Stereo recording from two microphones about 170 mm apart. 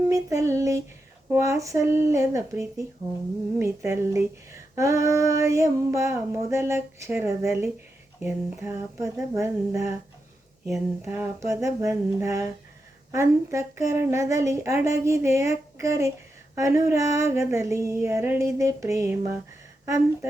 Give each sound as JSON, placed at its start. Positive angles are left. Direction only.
{"t": 0.1, "sound": "child singing", "side_deg": -20}
{"t": 1.3, "sound": "speech", "side_deg": -15}
{"t": 11.0, "sound": "speech", "side_deg": -15}